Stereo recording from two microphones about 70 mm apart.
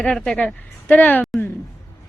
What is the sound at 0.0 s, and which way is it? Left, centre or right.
Speech, centre.